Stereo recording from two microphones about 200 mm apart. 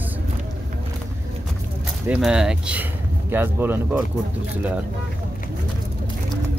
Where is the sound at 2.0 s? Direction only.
5° right (ahead or behind).